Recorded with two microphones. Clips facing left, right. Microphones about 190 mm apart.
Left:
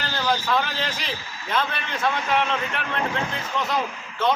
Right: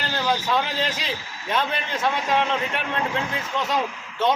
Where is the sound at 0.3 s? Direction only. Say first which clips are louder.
Even; 20° right (ahead or behind).